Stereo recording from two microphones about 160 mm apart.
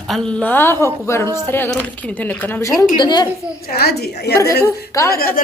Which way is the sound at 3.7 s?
80° left.